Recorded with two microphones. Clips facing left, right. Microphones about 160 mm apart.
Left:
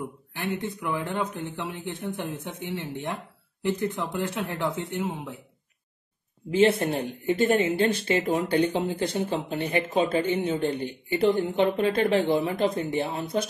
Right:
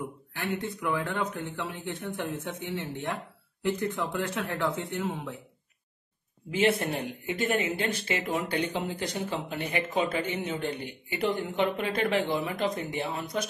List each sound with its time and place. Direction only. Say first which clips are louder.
0.3 s speech: left 2 dB; 15° left (ahead or behind)
6.5 s a woman's voice: left 5 dB; 30° left (ahead or behind)